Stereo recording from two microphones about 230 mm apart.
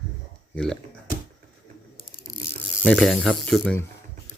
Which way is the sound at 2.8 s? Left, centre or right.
Centre.